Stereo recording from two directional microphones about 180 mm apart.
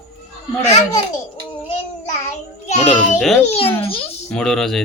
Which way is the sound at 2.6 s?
40° left (ahead or behind).